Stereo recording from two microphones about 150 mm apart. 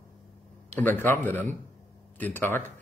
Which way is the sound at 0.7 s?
10° left (ahead or behind).